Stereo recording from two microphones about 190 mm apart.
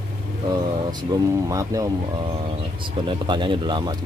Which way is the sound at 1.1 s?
20° right (ahead or behind).